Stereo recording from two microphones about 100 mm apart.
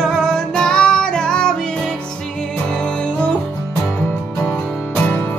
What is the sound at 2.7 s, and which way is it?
Music, 10° left (ahead or behind).